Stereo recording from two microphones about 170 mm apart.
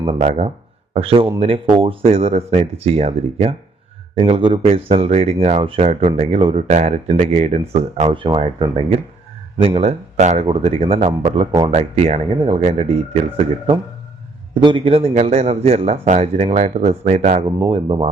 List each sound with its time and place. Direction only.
0.0 s speech: 35° right (ahead or behind)